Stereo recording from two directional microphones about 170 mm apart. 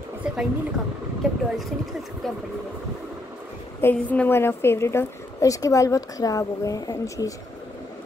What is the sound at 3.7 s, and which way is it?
A woman's voice, 10° left (ahead or behind).